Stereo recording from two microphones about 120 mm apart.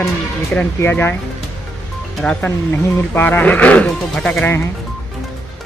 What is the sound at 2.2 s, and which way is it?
Speech, 10° left (ahead or behind).